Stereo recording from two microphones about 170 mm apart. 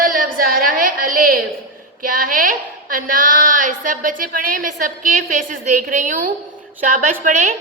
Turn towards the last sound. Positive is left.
turn(degrees=-45)  # may be behind; listen again after turning